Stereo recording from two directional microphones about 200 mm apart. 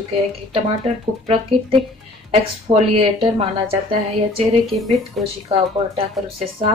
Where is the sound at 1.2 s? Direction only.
25° right (ahead or behind).